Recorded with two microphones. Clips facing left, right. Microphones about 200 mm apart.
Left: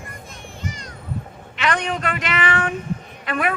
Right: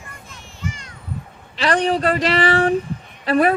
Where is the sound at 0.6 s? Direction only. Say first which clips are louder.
Right 3 dB; 35° left (ahead or behind).